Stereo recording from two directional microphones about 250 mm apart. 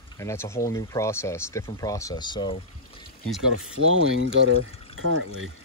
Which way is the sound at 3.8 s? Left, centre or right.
Right.